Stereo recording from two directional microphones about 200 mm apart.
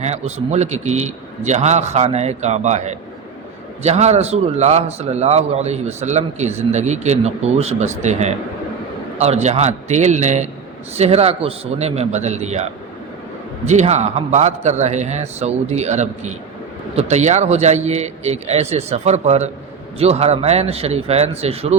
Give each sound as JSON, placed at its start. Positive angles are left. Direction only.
{"t": 0.0, "sound": "a man's voice", "side_deg": -35}